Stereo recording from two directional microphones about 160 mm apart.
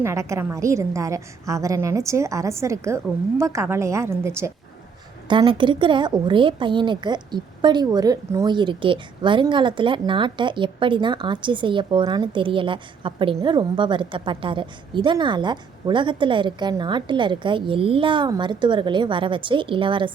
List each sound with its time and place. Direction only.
0.0 s a woman's voice: 20° right (ahead or behind)
5.3 s a woman's voice: 30° right (ahead or behind)